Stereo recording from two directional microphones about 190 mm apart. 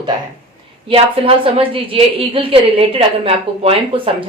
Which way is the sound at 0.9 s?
30° right (ahead or behind).